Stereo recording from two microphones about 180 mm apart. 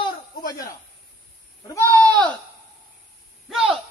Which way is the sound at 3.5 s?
5° right (ahead or behind).